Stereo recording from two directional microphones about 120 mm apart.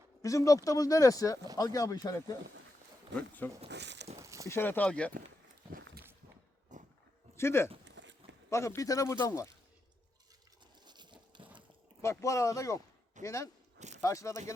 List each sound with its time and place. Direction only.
0.2 s speech: 25° left (ahead or behind)
3.2 s speech: 15° left (ahead or behind)
3.6 s speech: 65° right (ahead or behind)
4.2 s a sound: 25° right (ahead or behind)
4.4 s speech: 20° left (ahead or behind)
6.7 s a sound: 90° right
7.3 s speech: 20° left (ahead or behind)
10.8 s crumpling: 40° right (ahead or behind)
12.0 s speech: 25° left (ahead or behind)
13.7 s biting: 75° right (ahead or behind)
14.0 s speech: 25° left (ahead or behind)